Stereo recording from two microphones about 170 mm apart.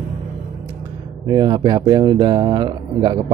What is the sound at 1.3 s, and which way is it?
Speech, 25° right (ahead or behind).